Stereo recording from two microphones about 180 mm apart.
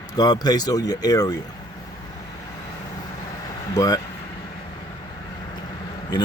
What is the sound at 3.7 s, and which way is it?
Speech, 20° left (ahead or behind).